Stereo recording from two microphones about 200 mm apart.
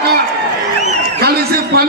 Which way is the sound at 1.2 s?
50° right (ahead or behind).